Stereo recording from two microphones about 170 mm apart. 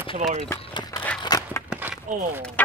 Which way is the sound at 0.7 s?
30° left (ahead or behind).